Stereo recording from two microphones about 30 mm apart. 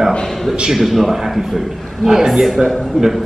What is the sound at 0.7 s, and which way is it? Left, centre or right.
Speech, centre.